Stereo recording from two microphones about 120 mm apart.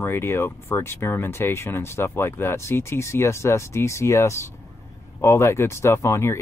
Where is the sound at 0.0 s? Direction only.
20° left (ahead or behind).